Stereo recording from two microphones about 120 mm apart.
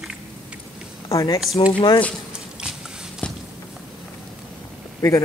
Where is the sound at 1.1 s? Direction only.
25° left (ahead or behind).